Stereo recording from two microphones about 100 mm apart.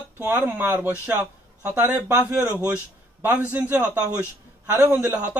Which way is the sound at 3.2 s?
20° right (ahead or behind).